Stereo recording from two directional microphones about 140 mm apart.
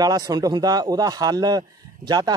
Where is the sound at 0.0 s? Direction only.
25° right (ahead or behind).